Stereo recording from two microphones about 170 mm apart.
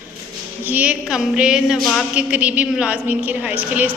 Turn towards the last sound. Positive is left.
turn(degrees=-10)  # may be behind; listen again after turning